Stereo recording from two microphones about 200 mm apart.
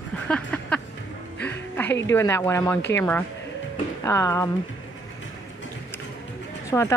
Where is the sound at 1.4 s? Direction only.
10° left (ahead or behind).